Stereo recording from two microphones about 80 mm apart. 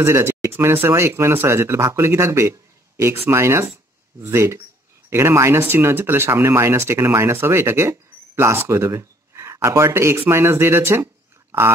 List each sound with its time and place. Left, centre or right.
0.0 s speech: right